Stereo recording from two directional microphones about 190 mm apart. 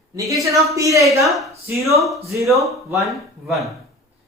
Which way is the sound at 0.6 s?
15° right (ahead or behind).